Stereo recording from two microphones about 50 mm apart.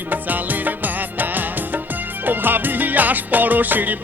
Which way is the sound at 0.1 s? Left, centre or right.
Right.